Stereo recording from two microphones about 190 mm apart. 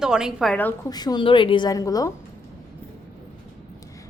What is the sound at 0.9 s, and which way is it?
A woman's voice, 20° left (ahead or behind).